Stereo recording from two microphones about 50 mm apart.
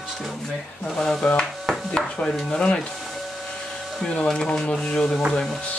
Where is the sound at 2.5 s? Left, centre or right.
Centre.